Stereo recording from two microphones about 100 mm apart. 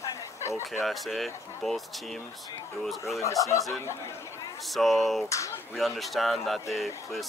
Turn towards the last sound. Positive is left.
turn(degrees=0)  # may be behind; listen again after turning